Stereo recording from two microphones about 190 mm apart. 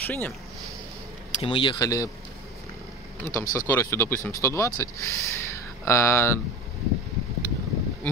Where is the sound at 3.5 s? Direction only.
15° left (ahead or behind).